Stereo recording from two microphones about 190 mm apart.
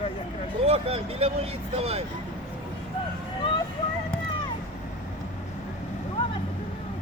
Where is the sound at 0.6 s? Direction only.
30° right (ahead or behind).